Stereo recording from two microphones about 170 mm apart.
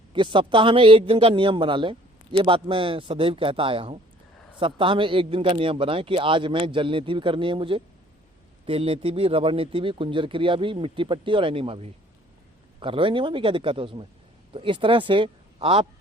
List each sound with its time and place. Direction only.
0.1 s a man's voice: 30° right (ahead or behind)